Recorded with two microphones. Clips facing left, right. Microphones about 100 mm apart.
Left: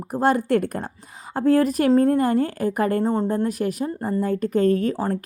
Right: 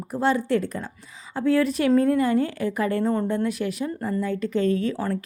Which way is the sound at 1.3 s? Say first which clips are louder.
Left 3 dB; 45° left (ahead or behind).